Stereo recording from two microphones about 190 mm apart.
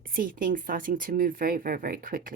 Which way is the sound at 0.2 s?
45° right (ahead or behind).